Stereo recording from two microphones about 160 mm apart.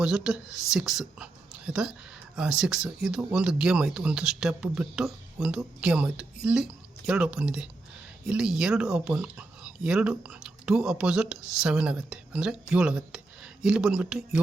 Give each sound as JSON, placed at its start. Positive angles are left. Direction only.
{"t": 0.0, "sound": "speech", "side_deg": -5}